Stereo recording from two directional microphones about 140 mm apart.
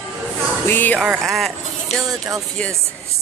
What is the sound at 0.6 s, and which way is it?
Speech, 15° left (ahead or behind).